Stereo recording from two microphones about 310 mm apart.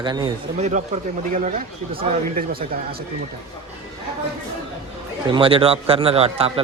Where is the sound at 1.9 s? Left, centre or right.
Right.